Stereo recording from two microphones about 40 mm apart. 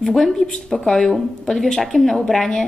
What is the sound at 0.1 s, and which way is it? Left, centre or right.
Speech, centre.